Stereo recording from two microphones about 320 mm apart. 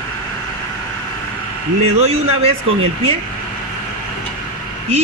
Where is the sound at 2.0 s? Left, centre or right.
Centre.